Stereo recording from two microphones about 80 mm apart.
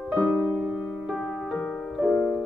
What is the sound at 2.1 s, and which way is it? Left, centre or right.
Music, left.